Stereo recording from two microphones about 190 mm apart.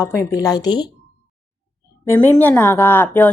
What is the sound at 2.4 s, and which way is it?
Speech, 10° left (ahead or behind).